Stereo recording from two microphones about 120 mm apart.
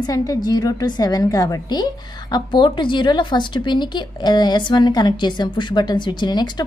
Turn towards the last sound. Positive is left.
turn(degrees=35)  # may be behind; listen again after turning